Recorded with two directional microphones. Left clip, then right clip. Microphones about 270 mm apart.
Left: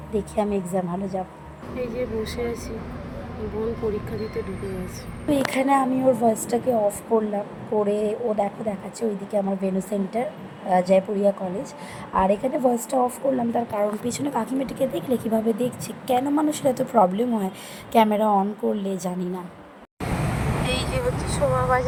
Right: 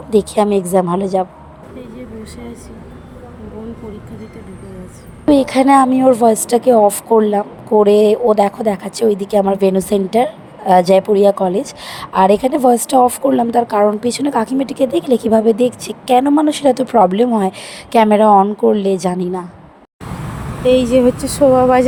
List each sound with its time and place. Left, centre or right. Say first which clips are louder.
0.1 s a woman's voice: right 12 dB; right
5.3 s a woman's voice: right 10 dB; right
20.7 s speech: right 17 dB; right